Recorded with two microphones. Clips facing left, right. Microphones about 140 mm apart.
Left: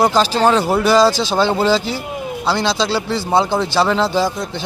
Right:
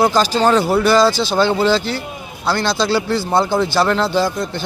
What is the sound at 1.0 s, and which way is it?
Speech, 35° left (ahead or behind).